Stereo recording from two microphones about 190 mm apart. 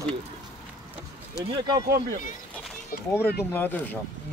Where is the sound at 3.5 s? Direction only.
10° left (ahead or behind).